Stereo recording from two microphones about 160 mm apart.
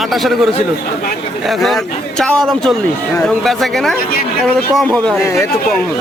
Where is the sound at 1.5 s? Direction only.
Centre (ahead or behind).